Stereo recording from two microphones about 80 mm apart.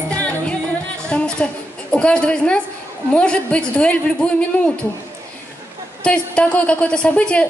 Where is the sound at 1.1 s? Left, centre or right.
Centre.